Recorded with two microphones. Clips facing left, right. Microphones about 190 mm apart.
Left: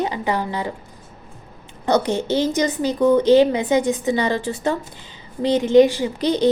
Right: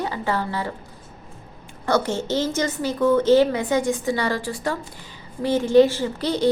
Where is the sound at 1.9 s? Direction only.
20° left (ahead or behind).